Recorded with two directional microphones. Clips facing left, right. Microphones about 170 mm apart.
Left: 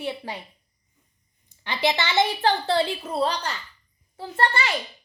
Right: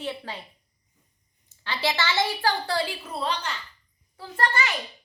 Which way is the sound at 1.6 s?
15° left (ahead or behind).